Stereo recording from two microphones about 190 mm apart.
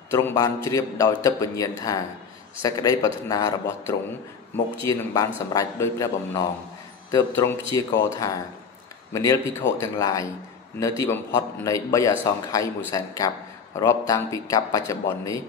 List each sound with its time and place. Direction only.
0.1 s a man's voice: 15° left (ahead or behind)